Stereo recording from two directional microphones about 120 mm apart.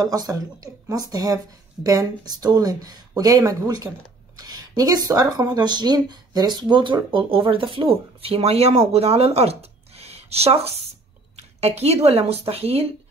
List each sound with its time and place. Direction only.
0.0 s a woman's voice: 30° right (ahead or behind); by 12.8 s 55° right (ahead or behind)